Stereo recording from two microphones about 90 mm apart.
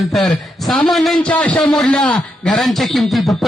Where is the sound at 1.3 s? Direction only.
15° left (ahead or behind).